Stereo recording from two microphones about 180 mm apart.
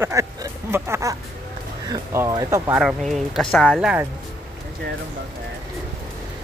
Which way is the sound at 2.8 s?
Centre (ahead or behind).